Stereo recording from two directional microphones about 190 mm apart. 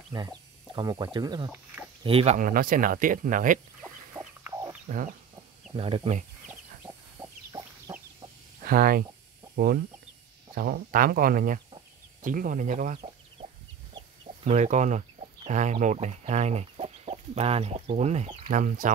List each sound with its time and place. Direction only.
0.1 s speech: 20° right (ahead or behind)
2.3 s speech: 50° right (ahead or behind)
4.1 s chicken: 10° right (ahead or behind)
4.8 s chicken: 45° right (ahead or behind)
5.8 s speech: 30° right (ahead or behind)
7.2 s chicken: 15° right (ahead or behind)
8.6 s speech: 50° right (ahead or behind)
10.5 s speech: 50° right (ahead or behind)